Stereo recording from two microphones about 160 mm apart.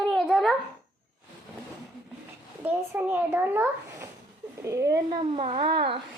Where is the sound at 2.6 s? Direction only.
10° right (ahead or behind).